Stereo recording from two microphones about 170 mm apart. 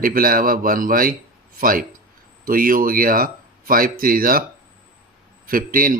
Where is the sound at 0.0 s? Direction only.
55° right (ahead or behind).